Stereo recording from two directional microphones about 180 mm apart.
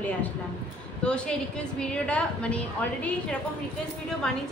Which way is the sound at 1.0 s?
5° left (ahead or behind).